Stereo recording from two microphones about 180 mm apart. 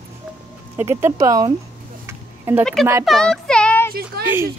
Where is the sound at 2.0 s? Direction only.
15° right (ahead or behind).